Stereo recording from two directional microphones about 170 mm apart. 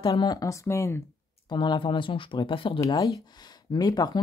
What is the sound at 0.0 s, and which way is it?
Speech, 25° left (ahead or behind).